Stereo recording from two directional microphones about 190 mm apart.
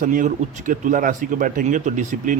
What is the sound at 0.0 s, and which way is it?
Speech, 45° right (ahead or behind).